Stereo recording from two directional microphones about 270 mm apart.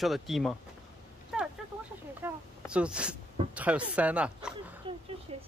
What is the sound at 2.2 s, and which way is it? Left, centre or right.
Speech, centre.